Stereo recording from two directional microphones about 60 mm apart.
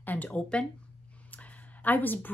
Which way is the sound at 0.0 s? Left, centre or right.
Left.